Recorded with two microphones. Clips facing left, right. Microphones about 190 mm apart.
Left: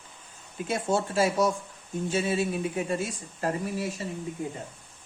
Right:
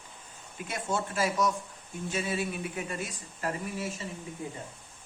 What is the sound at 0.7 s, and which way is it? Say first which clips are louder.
Speech: left 6 dB; 30° left (ahead or behind).